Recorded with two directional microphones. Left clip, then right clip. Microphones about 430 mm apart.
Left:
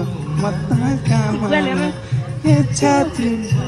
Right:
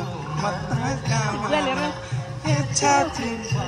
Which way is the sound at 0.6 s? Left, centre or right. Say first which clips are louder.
Left 5 dB; left.